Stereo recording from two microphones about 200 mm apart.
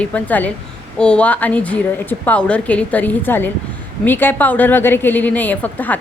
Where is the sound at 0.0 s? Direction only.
5° left (ahead or behind).